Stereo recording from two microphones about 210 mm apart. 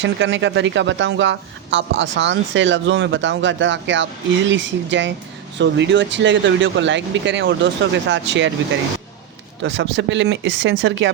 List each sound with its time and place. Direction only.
0.0 s speech: 60° right (ahead or behind)
9.6 s speech: 65° right (ahead or behind)